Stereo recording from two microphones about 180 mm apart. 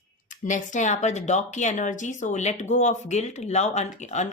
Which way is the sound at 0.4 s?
45° left (ahead or behind).